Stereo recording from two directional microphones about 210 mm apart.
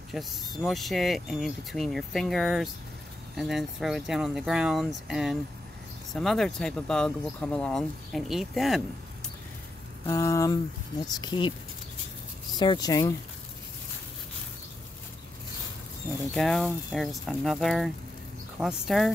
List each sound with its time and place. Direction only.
0.1 s speech: centre (ahead or behind)
10.0 s speech: 15° left (ahead or behind)
12.5 s speech: 20° left (ahead or behind)
16.3 s speech: centre (ahead or behind)